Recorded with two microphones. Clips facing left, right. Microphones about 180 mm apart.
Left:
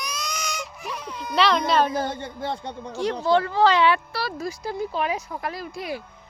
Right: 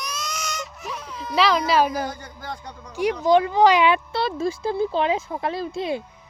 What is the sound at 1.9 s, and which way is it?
Speech, 25° left (ahead or behind).